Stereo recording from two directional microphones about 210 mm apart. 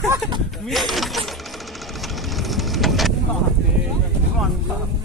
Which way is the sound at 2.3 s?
Centre (ahead or behind).